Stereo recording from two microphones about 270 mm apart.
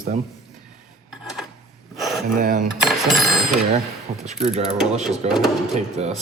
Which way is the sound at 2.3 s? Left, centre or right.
Right.